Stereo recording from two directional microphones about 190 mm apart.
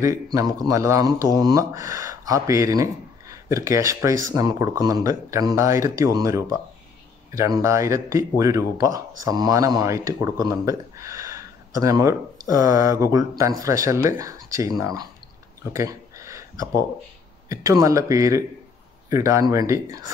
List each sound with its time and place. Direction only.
0.0 s speech: 15° right (ahead or behind)
15.7 s a sound: 15° right (ahead or behind)
17.5 s speech: 15° right (ahead or behind)